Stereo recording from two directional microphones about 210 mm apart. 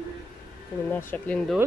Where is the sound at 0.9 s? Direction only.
5° left (ahead or behind).